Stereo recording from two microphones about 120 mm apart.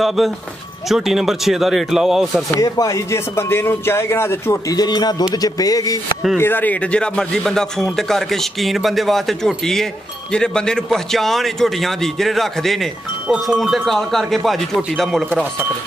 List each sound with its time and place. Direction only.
0.0 s a man's voice: centre (ahead or behind)
2.5 s speech: 30° left (ahead or behind)
4.7 s speech: 35° left (ahead or behind)
6.3 s a man's voice: 15° left (ahead or behind)